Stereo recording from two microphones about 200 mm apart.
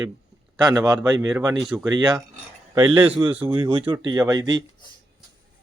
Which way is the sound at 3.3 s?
10° right (ahead or behind).